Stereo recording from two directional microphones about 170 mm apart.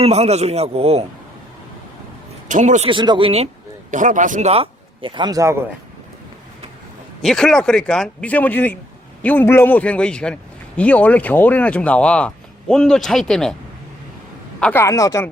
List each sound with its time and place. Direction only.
0.0 s a man's voice: 40° right (ahead or behind)
2.5 s speech: 45° right (ahead or behind)
2.9 s a man's voice: 30° right (ahead or behind)
3.9 s a man's voice: 50° right (ahead or behind); by 5.6 s 15° right (ahead or behind)
7.2 s speech: 5° left (ahead or behind)
14.6 s speech: 15° left (ahead or behind)